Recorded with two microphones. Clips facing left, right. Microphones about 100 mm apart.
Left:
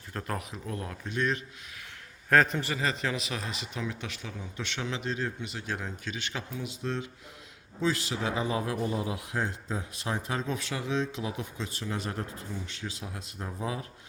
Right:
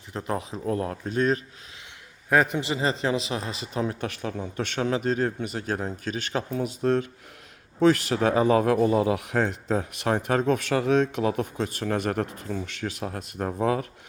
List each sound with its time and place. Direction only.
0.1 s speech: 20° right (ahead or behind)
0.5 s speech: 35° right (ahead or behind)
2.3 s a man's voice: 15° right (ahead or behind); by 13.8 s 65° right (ahead or behind)